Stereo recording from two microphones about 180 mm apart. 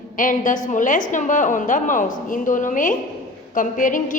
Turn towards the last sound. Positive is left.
turn(degrees=45)  # may be behind; listen again after turning